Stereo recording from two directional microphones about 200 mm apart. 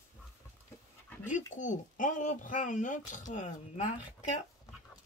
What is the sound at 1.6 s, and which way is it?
Speech, 40° left (ahead or behind).